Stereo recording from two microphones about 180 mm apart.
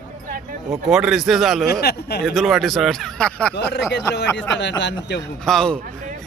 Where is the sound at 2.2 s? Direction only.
Centre (ahead or behind).